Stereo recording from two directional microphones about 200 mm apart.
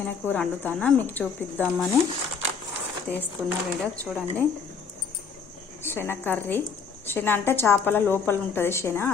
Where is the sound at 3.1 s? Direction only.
5° left (ahead or behind).